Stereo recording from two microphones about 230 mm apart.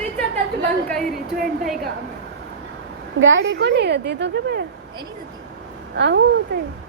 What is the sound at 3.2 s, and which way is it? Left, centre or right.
A woman's voice, right.